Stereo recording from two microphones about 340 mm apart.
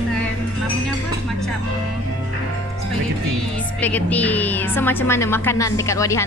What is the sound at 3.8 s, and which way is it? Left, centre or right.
A woman's voice, centre.